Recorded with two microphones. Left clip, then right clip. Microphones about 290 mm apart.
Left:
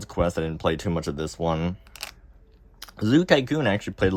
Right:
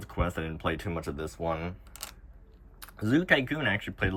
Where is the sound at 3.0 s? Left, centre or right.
Centre.